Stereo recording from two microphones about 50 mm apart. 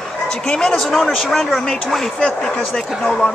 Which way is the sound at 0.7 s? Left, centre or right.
Centre.